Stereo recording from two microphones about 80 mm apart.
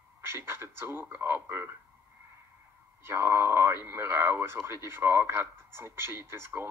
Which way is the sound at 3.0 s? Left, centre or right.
Right.